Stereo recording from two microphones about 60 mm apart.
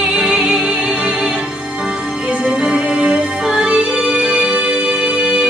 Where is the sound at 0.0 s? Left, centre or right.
Centre.